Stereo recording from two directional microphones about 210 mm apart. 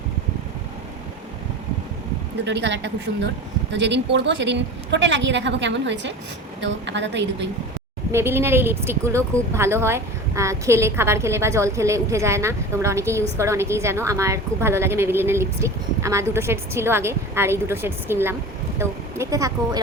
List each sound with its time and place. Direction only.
2.4 s a woman's voice: 55° right (ahead or behind)
8.1 s a woman's voice: 10° right (ahead or behind)